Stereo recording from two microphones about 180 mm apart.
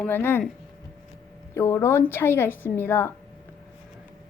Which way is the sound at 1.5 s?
15° left (ahead or behind).